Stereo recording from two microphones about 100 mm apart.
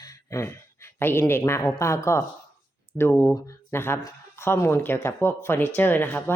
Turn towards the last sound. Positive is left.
turn(degrees=20)  # may be behind; listen again after turning